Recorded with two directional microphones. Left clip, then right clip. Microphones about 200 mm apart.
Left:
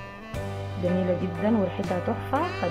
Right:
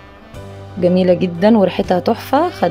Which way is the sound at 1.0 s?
40° right (ahead or behind).